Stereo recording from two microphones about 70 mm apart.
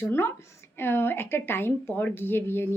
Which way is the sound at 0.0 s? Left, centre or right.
Left.